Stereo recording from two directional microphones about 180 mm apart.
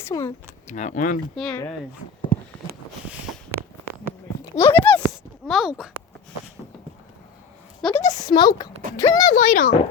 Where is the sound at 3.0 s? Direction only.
5° right (ahead or behind).